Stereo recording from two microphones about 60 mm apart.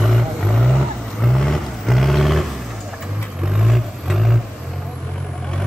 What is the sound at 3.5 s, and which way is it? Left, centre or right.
Vehicle, centre.